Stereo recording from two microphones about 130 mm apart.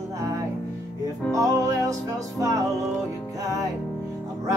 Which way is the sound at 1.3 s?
25° right (ahead or behind).